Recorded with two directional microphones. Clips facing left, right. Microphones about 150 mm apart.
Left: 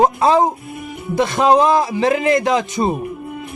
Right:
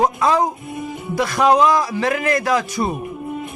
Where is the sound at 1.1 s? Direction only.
25° left (ahead or behind).